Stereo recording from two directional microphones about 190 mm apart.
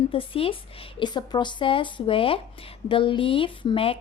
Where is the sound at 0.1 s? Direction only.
30° left (ahead or behind).